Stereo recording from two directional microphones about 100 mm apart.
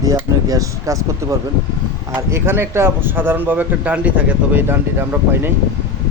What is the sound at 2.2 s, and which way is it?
A man's voice, 25° right (ahead or behind).